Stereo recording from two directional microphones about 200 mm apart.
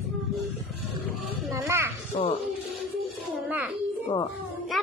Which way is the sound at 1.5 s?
15° right (ahead or behind).